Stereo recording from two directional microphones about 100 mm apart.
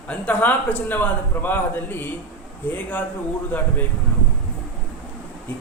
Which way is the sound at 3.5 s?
15° left (ahead or behind).